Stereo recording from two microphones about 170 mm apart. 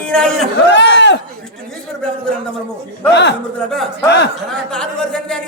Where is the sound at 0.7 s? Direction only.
90° left.